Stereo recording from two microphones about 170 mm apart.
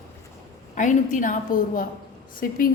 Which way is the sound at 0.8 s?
50° left (ahead or behind).